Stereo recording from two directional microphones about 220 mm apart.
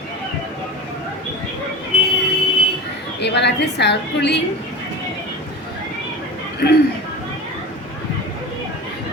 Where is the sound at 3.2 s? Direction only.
50° left (ahead or behind).